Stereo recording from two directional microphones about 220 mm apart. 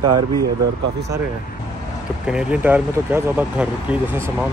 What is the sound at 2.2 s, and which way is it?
Speech, 5° right (ahead or behind).